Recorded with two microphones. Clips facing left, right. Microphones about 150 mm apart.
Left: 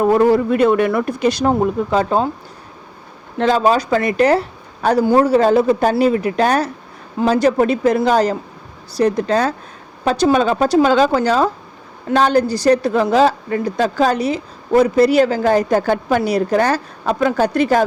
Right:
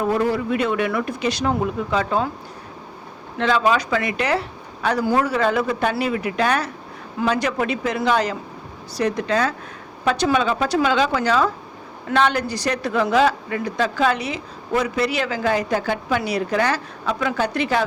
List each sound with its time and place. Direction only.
0.0 s speech: 45° left (ahead or behind)
3.3 s a woman's voice: 40° left (ahead or behind)